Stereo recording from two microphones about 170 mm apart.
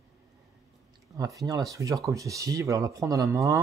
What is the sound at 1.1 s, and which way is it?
Speech, 20° right (ahead or behind).